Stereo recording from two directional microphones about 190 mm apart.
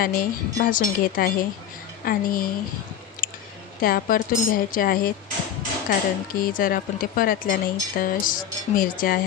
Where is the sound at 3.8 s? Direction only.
50° left (ahead or behind).